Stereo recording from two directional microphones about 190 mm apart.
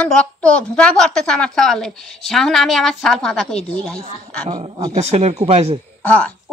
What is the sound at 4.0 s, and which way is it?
Speech, 30° right (ahead or behind).